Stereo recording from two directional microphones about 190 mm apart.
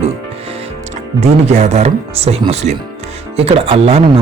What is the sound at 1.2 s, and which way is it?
Speech, 35° right (ahead or behind).